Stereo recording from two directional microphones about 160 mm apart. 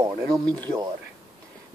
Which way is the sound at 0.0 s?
20° right (ahead or behind).